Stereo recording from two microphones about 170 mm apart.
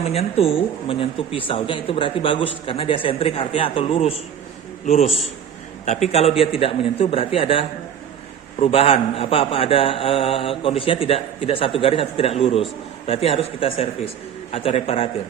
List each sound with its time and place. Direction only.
0.0 s a woman's voice: 35° left (ahead or behind)
8.6 s a woman's voice: 35° left (ahead or behind)